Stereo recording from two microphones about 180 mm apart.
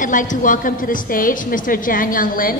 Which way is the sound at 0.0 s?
45° left (ahead or behind).